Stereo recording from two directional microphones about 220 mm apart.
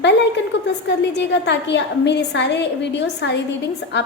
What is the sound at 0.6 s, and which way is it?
A woman's voice, 50° left (ahead or behind).